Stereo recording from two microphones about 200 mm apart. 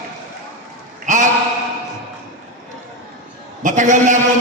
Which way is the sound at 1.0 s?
40° right (ahead or behind).